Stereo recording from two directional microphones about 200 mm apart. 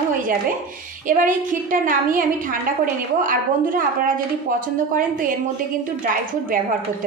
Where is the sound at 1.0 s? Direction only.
40° right (ahead or behind).